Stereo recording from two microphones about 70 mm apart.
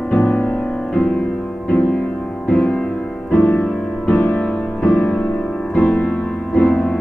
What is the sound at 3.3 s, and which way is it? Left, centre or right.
Music, left.